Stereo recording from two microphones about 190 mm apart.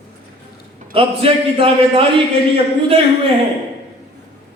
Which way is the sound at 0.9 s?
30° right (ahead or behind).